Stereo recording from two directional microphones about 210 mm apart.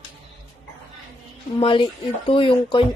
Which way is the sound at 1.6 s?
25° left (ahead or behind).